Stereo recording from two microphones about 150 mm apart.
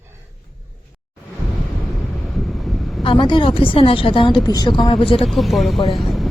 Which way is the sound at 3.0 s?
35° left (ahead or behind).